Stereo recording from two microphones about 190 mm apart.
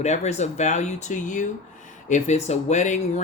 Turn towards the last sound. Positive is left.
turn(degrees=40)  # may be behind; listen again after turning